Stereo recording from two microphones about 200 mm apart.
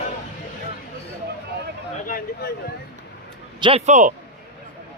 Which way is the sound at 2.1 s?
45° left (ahead or behind).